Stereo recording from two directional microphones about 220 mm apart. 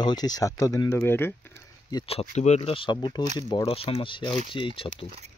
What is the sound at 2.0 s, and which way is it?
Speech, 25° left (ahead or behind).